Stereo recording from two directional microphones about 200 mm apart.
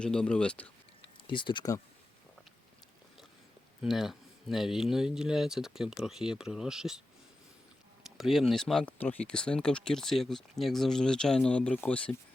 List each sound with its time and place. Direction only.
0.0 s speech: 5° left (ahead or behind)
1.3 s speech: 25° left (ahead or behind)
3.8 s speech: centre (ahead or behind)
8.2 s speech: centre (ahead or behind)